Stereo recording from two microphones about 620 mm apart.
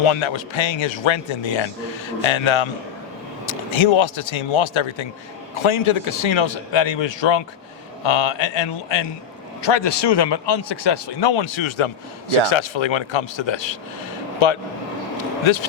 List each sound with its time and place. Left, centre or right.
0.0 s a man's voice: left